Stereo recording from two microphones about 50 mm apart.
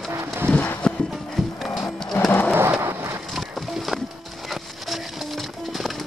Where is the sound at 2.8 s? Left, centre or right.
Right.